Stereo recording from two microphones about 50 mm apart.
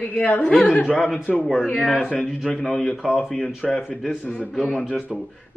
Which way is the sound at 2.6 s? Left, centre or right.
Centre.